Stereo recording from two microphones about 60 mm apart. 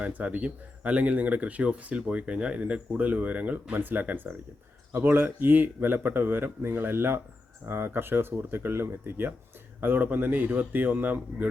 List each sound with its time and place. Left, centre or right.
0.0 s speech: right